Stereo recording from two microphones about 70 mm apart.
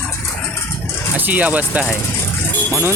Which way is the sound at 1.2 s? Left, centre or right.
Right.